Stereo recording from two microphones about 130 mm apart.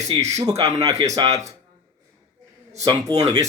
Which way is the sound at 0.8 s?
55° right (ahead or behind).